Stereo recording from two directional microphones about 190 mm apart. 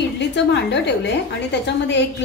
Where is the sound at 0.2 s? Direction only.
65° left (ahead or behind).